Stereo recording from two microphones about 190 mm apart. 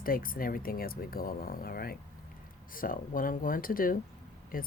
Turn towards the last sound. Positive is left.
turn(degrees=50)  # may be behind; listen again after turning